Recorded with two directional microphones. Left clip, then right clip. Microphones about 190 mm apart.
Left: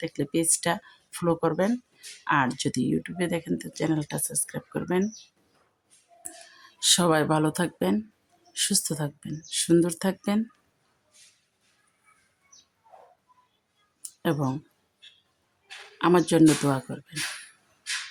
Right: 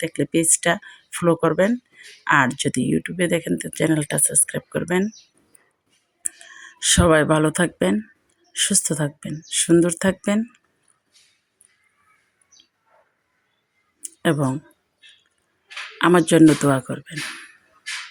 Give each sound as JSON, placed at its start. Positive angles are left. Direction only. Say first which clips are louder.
{"t": 0.0, "sound": "speech", "louder": "right 6 dB", "side_deg": -20}
{"t": 6.7, "sound": "speech", "louder": "right 6 dB", "side_deg": -15}
{"t": 14.2, "sound": "speech", "louder": "right 7 dB", "side_deg": -20}
{"t": 16.0, "sound": "speech", "louder": "right 6 dB", "side_deg": -20}